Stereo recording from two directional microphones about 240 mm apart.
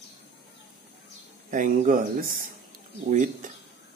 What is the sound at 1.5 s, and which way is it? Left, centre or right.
Speech, right.